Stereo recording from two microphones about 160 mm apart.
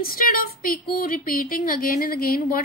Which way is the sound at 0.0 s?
65° left (ahead or behind).